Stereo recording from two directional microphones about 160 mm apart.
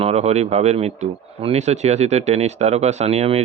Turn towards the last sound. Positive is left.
turn(degrees=-40)  # may be behind; listen again after turning